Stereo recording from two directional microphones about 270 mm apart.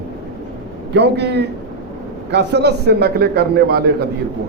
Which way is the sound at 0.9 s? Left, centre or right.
Right.